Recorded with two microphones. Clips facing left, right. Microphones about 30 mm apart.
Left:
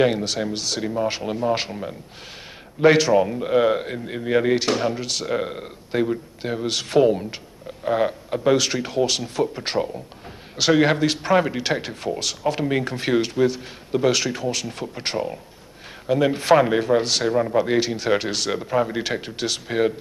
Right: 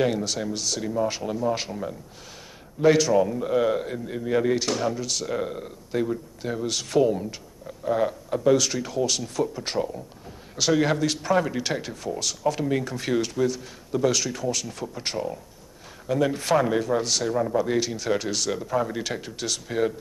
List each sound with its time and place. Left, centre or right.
0.0 s a man's voice: left
2.8 s a man's voice: left